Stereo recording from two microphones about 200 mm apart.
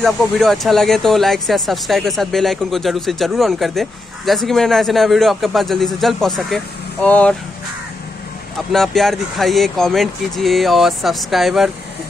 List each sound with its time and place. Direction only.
0.0 s speech: centre (ahead or behind)
8.7 s speech: centre (ahead or behind)